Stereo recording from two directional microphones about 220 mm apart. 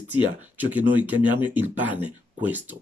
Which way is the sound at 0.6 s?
10° right (ahead or behind).